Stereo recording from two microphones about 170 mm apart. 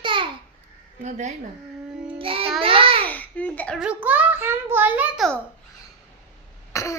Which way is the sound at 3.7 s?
5° right (ahead or behind).